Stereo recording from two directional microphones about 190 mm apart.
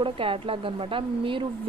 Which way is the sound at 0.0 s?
30° right (ahead or behind).